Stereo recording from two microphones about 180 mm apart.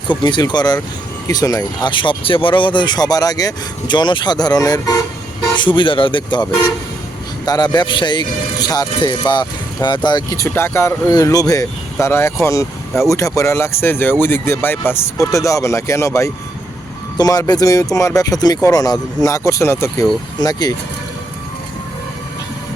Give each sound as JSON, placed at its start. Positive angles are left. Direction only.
{"t": 0.1, "sound": "speech", "side_deg": 25}